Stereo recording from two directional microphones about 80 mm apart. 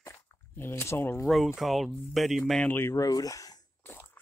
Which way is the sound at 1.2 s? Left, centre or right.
Centre.